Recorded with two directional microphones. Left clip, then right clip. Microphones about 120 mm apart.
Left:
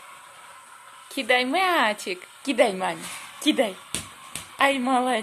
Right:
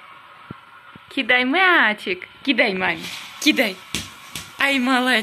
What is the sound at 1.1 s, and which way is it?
A woman's voice, 30° left (ahead or behind).